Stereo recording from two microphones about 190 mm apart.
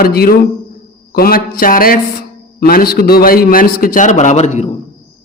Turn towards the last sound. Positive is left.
turn(degrees=35)  # may be behind; listen again after turning